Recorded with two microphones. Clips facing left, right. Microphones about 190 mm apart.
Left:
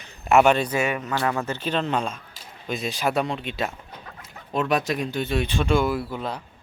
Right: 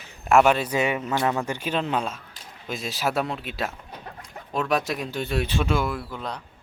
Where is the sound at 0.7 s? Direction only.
15° right (ahead or behind); by 6.4 s 5° left (ahead or behind).